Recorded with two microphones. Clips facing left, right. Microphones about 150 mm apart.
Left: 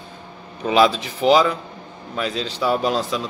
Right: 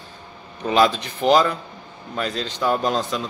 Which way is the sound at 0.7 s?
5° left (ahead or behind).